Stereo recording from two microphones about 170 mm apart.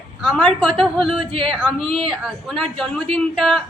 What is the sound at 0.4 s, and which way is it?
Speech, 5° left (ahead or behind).